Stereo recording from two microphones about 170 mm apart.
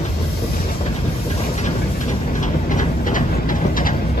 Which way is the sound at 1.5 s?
45° left (ahead or behind).